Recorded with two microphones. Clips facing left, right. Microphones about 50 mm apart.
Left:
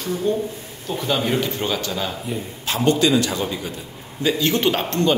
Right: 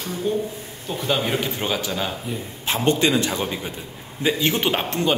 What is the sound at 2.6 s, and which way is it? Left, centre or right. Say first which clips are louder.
A man's voice: left 1 dB; right.